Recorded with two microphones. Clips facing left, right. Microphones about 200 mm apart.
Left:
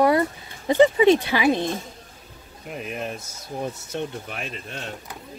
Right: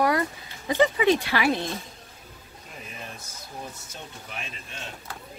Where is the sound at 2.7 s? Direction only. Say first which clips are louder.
Left 11 dB; 65° left (ahead or behind).